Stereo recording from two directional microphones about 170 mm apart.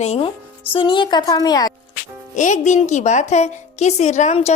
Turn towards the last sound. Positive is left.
turn(degrees=40)  # may be behind; listen again after turning